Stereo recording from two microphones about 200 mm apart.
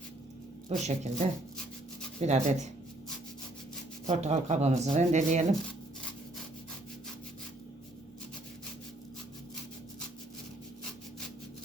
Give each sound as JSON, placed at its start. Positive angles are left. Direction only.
{"t": 0.7, "sound": "speech", "side_deg": -35}
{"t": 2.2, "sound": "speech", "side_deg": -35}
{"t": 4.0, "sound": "speech", "side_deg": -35}